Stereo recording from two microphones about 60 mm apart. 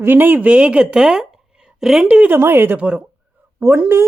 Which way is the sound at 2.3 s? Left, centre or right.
Right.